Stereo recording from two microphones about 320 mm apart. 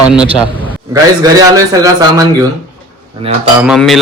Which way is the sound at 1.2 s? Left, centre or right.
Centre.